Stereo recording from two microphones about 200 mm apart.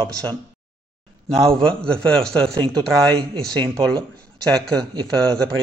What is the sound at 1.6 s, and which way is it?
Speech, 5° left (ahead or behind).